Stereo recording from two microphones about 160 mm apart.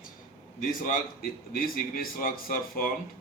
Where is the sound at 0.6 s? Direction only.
60° left (ahead or behind).